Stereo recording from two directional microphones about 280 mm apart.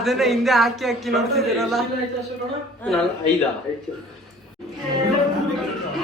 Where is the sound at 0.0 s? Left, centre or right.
Centre.